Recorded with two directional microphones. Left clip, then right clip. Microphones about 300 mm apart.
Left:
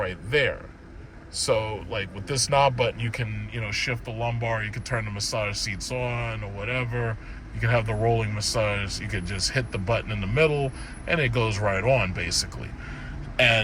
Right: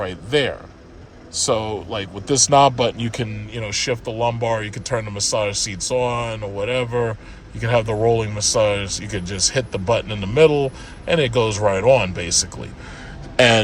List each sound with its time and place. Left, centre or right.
0.0 s speech: centre
13.3 s a man's voice: right